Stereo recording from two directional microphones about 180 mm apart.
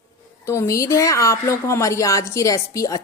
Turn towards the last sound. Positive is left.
turn(degrees=20)  # may be behind; listen again after turning